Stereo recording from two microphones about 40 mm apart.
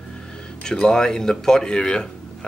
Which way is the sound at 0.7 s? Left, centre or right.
Centre.